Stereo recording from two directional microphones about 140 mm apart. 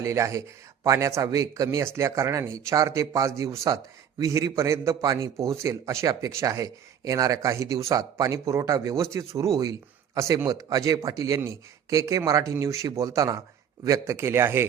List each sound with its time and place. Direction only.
0.0 s a man's voice: 20° right (ahead or behind)